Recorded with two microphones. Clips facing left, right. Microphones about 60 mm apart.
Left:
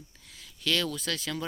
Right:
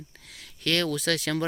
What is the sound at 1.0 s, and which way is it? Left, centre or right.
Speech, right.